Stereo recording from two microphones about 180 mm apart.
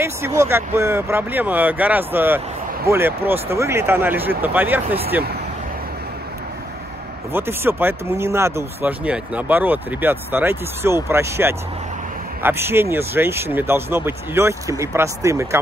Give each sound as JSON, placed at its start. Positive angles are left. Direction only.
{"t": 0.0, "sound": "speech", "side_deg": -15}
{"t": 7.3, "sound": "speech", "side_deg": -10}